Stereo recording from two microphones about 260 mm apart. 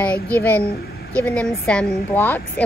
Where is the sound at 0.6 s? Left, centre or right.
Left.